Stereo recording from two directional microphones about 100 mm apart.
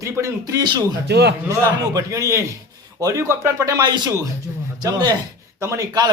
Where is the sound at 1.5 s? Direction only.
35° right (ahead or behind).